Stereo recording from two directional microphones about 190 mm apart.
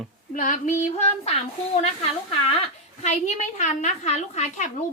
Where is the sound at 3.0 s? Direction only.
40° left (ahead or behind).